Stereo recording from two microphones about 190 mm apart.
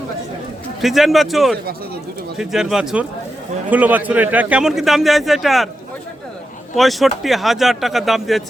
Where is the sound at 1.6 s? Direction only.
55° right (ahead or behind).